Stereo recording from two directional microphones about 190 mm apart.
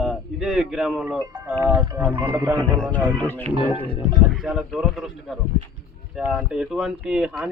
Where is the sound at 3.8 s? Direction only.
30° left (ahead or behind).